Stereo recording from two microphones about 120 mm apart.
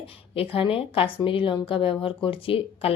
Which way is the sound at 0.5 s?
50° left (ahead or behind).